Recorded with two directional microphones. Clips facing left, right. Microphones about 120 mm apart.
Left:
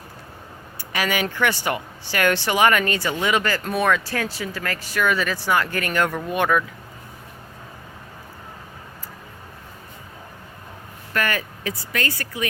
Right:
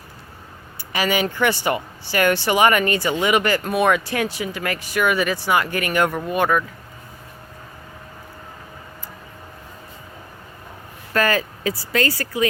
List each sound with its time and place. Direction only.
0.9 s speech: 5° right (ahead or behind)
11.1 s speech: 30° right (ahead or behind)